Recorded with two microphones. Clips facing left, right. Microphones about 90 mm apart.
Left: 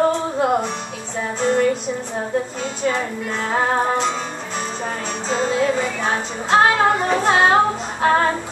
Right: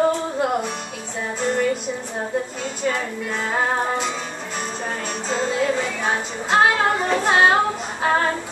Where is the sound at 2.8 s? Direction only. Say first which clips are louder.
Left 2 dB; centre (ahead or behind).